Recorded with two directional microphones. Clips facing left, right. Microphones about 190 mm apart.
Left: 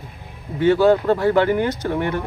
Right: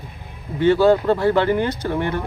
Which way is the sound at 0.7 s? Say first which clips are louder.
Even; 15° left (ahead or behind).